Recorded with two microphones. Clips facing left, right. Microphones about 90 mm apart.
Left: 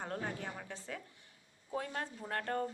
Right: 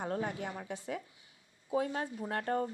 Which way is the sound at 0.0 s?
20° right (ahead or behind).